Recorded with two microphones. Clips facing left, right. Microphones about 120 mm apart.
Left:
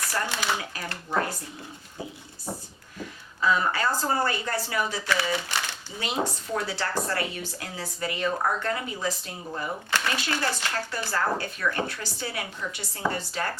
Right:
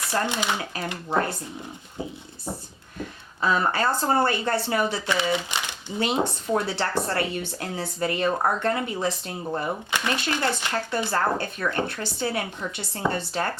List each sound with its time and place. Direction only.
0.0 s speech: 20° right (ahead or behind)
3.4 s speech: 30° right (ahead or behind)
9.9 s speech: 15° right (ahead or behind)
11.9 s a woman's voice: 55° right (ahead or behind)
12.6 s a woman's voice: 35° right (ahead or behind)